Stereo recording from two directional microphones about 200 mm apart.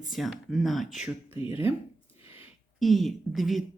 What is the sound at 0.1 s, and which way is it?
A woman's voice, centre (ahead or behind).